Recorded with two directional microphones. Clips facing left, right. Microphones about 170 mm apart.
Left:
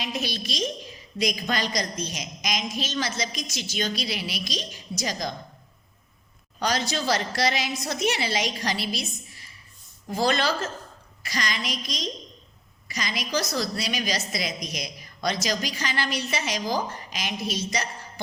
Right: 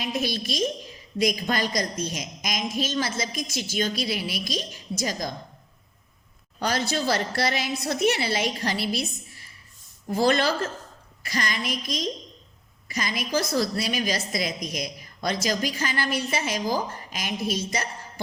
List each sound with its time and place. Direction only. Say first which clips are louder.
0.0 s a woman's voice: right 3 dB; 50° right (ahead or behind)
6.8 s a woman's voice: right 1 dB; 55° right (ahead or behind)
10.1 s a woman's voice: right 2 dB; 55° right (ahead or behind)
13.1 s a woman's voice: right 3 dB; 55° right (ahead or behind)